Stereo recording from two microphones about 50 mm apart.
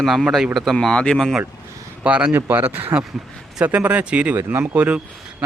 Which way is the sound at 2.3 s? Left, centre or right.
Right.